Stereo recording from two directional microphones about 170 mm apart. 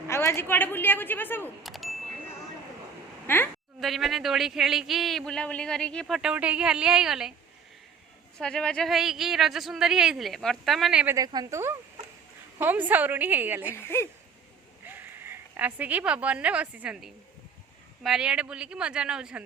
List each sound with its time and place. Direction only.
0.1 s a woman's voice: 15° left (ahead or behind)
1.6 s ding: centre (ahead or behind)
3.2 s a woman's voice: 10° left (ahead or behind)
3.8 s speech: centre (ahead or behind)
8.4 s speech: 5° left (ahead or behind)
11.1 s a woman's voice: 20° right (ahead or behind)
13.7 s a woman's voice: 15° left (ahead or behind)
14.8 s speech: 15° right (ahead or behind)